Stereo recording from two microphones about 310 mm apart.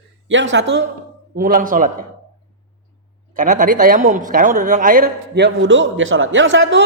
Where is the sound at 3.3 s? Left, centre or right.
Right.